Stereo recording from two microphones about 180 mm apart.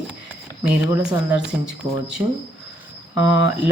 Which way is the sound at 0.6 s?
5° right (ahead or behind).